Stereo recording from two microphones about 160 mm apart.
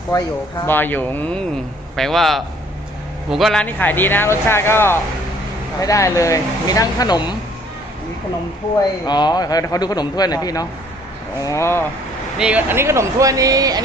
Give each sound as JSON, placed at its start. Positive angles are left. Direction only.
{"t": 0.1, "sound": "speech", "side_deg": 25}
{"t": 0.6, "sound": "a man's voice", "side_deg": 10}
{"t": 9.0, "sound": "speech", "side_deg": 25}
{"t": 12.4, "sound": "speech", "side_deg": -10}